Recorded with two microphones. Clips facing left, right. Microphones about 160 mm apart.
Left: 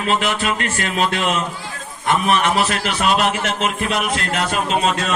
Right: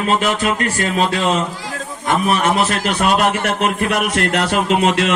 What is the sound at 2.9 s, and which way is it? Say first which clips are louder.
A man's voice: right 4 dB; 50° right (ahead or behind).